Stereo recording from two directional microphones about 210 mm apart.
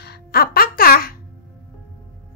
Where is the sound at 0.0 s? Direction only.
50° left (ahead or behind).